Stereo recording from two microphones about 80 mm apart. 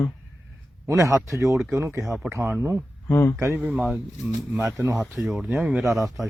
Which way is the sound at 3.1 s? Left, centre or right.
Left.